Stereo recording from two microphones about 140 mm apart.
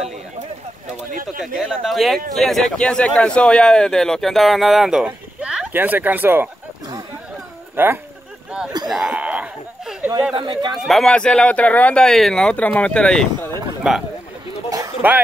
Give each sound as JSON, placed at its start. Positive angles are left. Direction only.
{"t": 1.6, "sound": "speech", "side_deg": 0}
{"t": 7.7, "sound": "speech", "side_deg": -15}
{"t": 8.8, "sound": "a sound", "side_deg": -5}
{"t": 10.3, "sound": "speech", "side_deg": -30}
{"t": 10.9, "sound": "speech", "side_deg": 5}
{"t": 15.0, "sound": "speech", "side_deg": -10}